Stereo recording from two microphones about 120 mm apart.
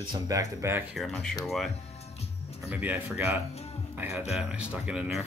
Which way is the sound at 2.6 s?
15° right (ahead or behind).